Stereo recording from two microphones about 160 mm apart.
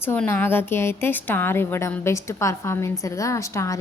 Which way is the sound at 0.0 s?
15° left (ahead or behind).